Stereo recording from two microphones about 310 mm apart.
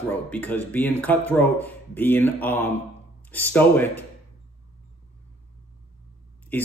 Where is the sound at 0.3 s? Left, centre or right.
Centre.